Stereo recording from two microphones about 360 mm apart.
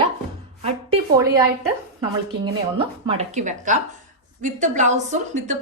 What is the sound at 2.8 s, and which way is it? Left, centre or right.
A woman's voice, centre.